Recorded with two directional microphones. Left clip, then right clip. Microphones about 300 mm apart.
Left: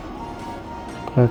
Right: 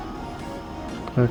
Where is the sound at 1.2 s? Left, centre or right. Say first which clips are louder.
Left 4 dB; centre.